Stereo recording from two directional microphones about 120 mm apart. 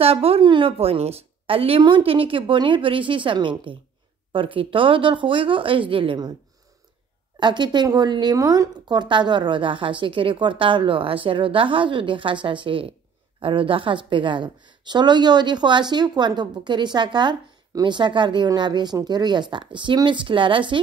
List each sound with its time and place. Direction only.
0.0 s a woman's voice: 55° right (ahead or behind)
7.3 s a woman's voice: 40° right (ahead or behind)